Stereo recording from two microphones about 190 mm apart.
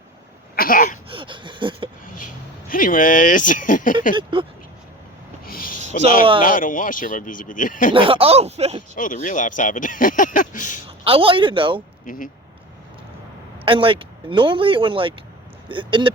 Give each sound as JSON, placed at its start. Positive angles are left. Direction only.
{"t": 0.5, "sound": "a sound", "side_deg": 50}
{"t": 1.1, "sound": "speech", "side_deg": -25}
{"t": 2.6, "sound": "speech", "side_deg": 45}
{"t": 4.1, "sound": "speech", "side_deg": -25}
{"t": 5.5, "sound": "a sound", "side_deg": 50}
{"t": 5.9, "sound": "speech", "side_deg": 45}
{"t": 7.9, "sound": "speech", "side_deg": -30}
{"t": 9.0, "sound": "speech", "side_deg": 45}
{"t": 11.0, "sound": "speech", "side_deg": -30}
{"t": 12.0, "sound": "speech", "side_deg": 45}
{"t": 13.7, "sound": "speech", "side_deg": -30}